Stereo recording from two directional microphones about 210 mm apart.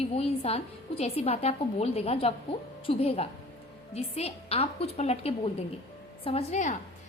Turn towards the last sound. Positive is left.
turn(degrees=35)  # may be behind; listen again after turning